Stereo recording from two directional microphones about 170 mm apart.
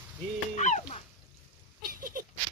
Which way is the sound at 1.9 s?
55° right (ahead or behind).